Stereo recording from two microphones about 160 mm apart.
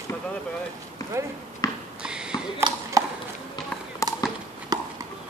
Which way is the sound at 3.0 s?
20° right (ahead or behind).